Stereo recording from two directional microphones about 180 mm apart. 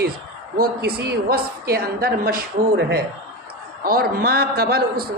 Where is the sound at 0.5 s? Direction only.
55° right (ahead or behind).